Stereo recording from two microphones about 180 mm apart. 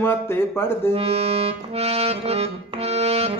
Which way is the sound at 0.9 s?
35° right (ahead or behind).